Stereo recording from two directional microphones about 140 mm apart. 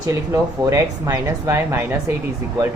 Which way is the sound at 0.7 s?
20° right (ahead or behind).